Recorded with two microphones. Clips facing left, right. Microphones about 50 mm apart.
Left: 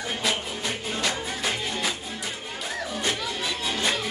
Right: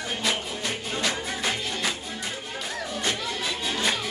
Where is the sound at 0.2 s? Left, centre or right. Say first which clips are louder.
Even; centre.